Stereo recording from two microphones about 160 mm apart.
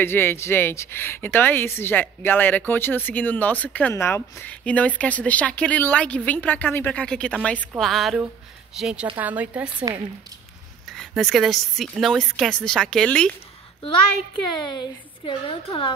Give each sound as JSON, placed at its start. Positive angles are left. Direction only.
{"t": 0.0, "sound": "a woman's voice", "side_deg": 15}
{"t": 10.9, "sound": "speech", "side_deg": 5}
{"t": 14.6, "sound": "a woman's voice", "side_deg": 30}